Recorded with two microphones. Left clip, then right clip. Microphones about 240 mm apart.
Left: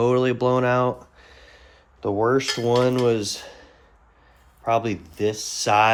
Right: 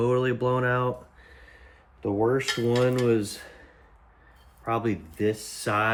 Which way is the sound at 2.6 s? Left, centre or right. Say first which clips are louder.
Left 4 dB; centre.